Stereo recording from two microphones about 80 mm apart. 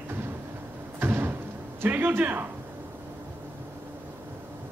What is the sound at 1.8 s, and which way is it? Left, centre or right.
Speech, right.